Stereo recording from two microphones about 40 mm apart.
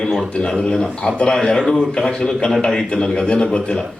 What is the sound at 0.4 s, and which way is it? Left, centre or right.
Speech, left.